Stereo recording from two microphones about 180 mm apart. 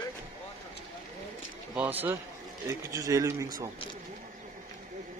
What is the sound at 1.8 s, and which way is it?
Speech, 10° right (ahead or behind).